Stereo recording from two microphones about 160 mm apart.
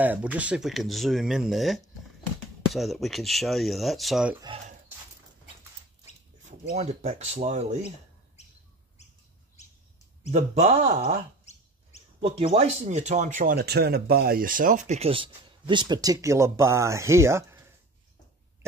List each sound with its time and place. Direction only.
0.0 s speech: 10° right (ahead or behind)
6.7 s speech: 45° right (ahead or behind)
10.3 s speech: 45° right (ahead or behind)
12.2 s speech: 40° right (ahead or behind)
13.6 s speech: 85° right; by 17.6 s 15° right (ahead or behind)